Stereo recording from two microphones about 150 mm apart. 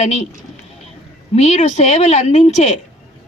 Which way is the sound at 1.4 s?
50° left (ahead or behind).